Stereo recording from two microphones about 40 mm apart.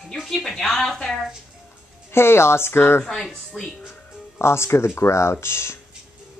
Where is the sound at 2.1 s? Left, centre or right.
Left.